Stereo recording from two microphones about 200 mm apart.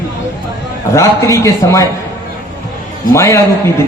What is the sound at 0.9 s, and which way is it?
Speech, 15° left (ahead or behind).